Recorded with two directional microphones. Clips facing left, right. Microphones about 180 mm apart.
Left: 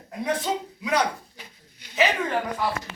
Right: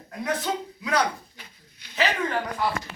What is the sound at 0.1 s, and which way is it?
Speech, 20° left (ahead or behind).